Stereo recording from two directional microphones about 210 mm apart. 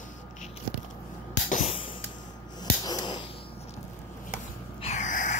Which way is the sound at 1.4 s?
30° left (ahead or behind).